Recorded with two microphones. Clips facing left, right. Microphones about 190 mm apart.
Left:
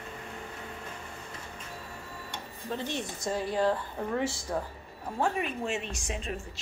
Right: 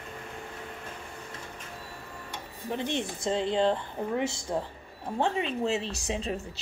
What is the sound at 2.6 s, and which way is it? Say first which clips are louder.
Speech: right 3 dB; 20° right (ahead or behind).